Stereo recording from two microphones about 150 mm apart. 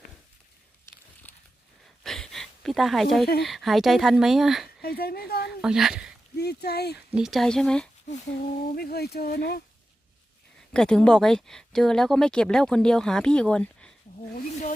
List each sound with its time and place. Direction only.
2.0 s a sound: 5° left (ahead or behind)
3.4 s speech: centre (ahead or behind)
4.8 s speech: 90° left
5.5 s speech: 5° right (ahead or behind)
6.3 s speech: 90° left
6.9 s speech: 5° right (ahead or behind)
8.1 s speech: 55° left (ahead or behind)
8.7 s speech: 90° left
10.7 s speech: 5° left (ahead or behind)